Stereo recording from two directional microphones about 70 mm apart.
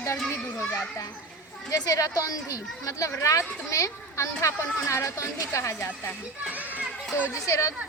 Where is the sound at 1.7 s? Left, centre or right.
Left.